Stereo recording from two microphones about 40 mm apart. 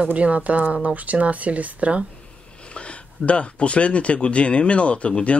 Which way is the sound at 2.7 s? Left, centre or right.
Left.